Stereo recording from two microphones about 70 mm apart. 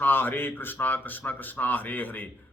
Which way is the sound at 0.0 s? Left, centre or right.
Left.